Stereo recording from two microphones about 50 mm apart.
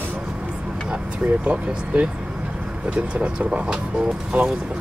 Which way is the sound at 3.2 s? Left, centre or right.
Right.